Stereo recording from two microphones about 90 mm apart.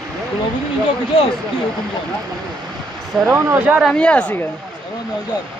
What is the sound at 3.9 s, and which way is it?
Speech, 10° left (ahead or behind).